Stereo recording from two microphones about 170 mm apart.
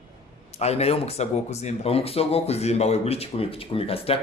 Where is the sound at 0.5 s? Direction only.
40° left (ahead or behind).